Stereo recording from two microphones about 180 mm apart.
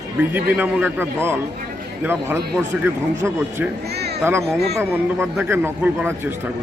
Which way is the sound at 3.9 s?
65° right (ahead or behind).